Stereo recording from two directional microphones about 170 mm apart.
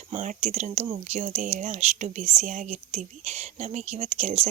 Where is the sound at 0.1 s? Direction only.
45° right (ahead or behind).